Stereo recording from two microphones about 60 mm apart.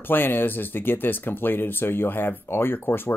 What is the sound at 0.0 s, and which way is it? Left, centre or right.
Speech, left.